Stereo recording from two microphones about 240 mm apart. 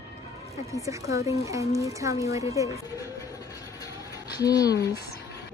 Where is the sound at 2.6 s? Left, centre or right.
Centre.